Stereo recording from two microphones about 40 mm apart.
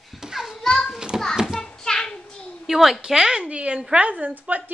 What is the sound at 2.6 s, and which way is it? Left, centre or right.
Speech, centre.